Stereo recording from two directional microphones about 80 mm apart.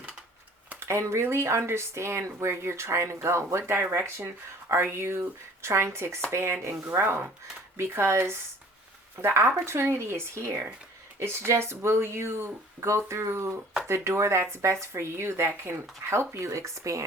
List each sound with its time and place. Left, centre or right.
0.8 s speech: right